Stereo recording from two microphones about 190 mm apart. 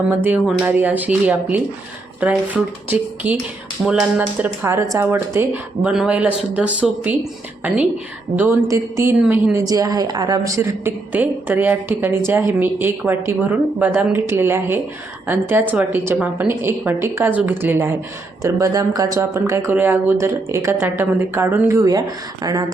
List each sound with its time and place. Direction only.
0.1 s a woman's voice: 10° right (ahead or behind)